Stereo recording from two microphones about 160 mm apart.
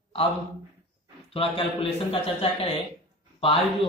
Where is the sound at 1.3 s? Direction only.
35° left (ahead or behind).